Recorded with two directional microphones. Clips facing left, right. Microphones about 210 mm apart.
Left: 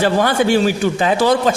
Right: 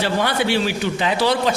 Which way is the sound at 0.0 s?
45° left (ahead or behind).